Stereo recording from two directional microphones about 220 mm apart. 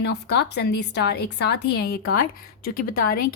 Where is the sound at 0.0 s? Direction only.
50° left (ahead or behind).